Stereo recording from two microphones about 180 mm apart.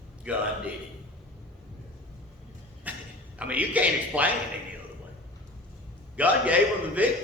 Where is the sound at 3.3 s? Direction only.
5° right (ahead or behind).